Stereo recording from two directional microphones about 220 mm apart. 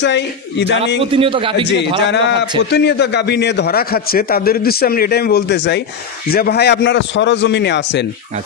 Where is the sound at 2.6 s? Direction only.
50° left (ahead or behind).